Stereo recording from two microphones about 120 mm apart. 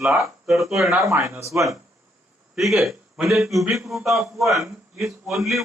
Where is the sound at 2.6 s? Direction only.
Centre (ahead or behind).